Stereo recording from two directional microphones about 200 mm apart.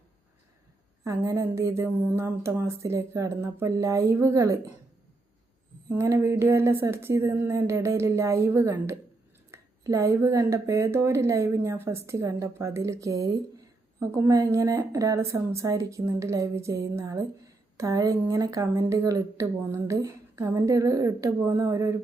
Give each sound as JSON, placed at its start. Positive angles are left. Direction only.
{"t": 1.0, "sound": "speech", "side_deg": -15}
{"t": 5.9, "sound": "speech", "side_deg": -15}